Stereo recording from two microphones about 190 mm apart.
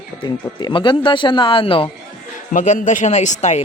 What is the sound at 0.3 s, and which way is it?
Speech, 25° left (ahead or behind).